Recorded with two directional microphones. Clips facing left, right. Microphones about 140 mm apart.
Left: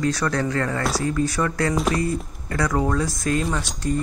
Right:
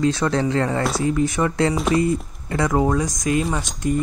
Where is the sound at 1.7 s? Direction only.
Centre (ahead or behind).